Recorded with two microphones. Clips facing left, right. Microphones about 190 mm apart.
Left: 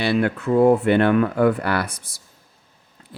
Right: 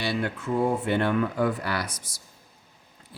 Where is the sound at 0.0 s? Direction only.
65° left (ahead or behind).